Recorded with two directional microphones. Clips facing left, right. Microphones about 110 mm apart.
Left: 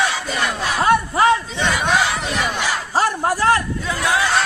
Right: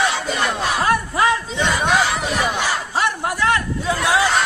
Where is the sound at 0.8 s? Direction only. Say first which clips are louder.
Left 4 dB; 25° left (ahead or behind).